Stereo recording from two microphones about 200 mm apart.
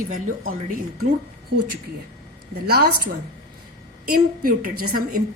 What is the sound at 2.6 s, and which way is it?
Speech, 50° right (ahead or behind).